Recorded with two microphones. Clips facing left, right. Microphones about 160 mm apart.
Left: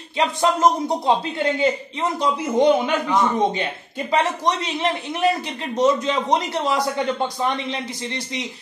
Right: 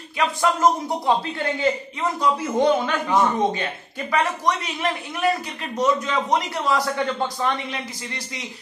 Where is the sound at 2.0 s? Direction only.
20° left (ahead or behind).